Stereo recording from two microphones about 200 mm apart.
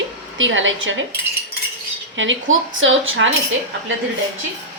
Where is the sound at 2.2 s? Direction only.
75° right (ahead or behind).